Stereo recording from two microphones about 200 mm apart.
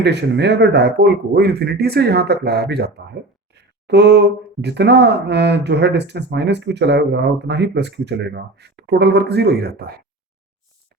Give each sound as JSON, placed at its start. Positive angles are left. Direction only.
{"t": 0.0, "sound": "speech", "side_deg": -60}